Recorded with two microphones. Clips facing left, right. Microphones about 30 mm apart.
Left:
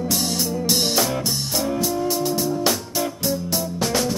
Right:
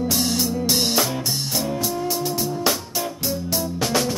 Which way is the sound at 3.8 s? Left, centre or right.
Centre.